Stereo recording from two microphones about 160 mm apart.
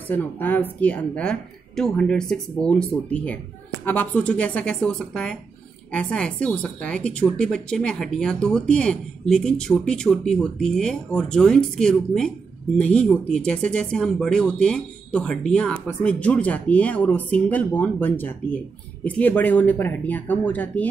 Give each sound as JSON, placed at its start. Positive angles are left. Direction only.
{"t": 0.1, "sound": "speech", "side_deg": 10}